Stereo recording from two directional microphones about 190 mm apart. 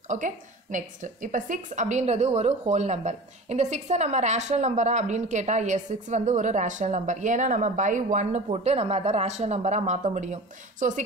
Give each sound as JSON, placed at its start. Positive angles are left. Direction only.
{"t": 0.1, "sound": "a woman's voice", "side_deg": -40}